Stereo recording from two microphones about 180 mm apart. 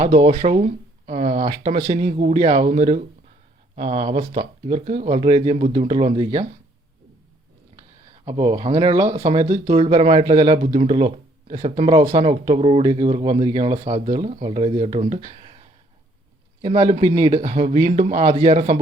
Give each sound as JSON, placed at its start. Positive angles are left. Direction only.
{"t": 0.0, "sound": "speech", "side_deg": -30}
{"t": 2.7, "sound": "speech", "side_deg": -40}
{"t": 3.8, "sound": "speech", "side_deg": -30}
{"t": 8.2, "sound": "speech", "side_deg": -25}
{"t": 17.2, "sound": "speech", "side_deg": -20}
{"t": 17.4, "sound": "speech", "side_deg": -40}